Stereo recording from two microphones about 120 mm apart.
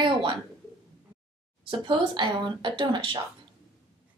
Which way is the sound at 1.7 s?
50° right (ahead or behind).